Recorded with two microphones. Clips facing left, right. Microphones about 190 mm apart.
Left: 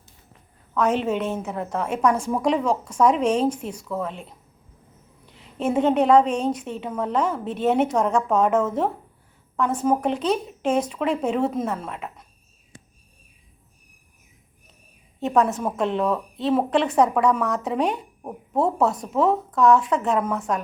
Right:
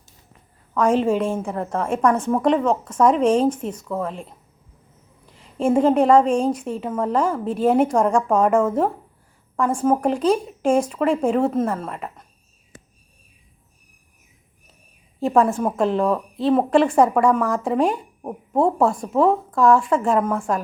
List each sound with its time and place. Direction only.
0.9 s a woman's voice: 5° left (ahead or behind)
5.2 s a sound: centre (ahead or behind)
6.6 s a woman's voice: 5° right (ahead or behind)
15.2 s a woman's voice: centre (ahead or behind)